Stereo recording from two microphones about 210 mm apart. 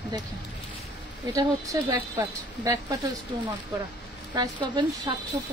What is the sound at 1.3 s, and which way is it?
Speech, 15° right (ahead or behind).